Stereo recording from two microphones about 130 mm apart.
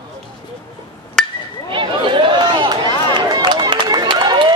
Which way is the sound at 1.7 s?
40° right (ahead or behind).